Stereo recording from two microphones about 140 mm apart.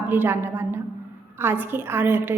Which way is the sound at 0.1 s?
15° right (ahead or behind).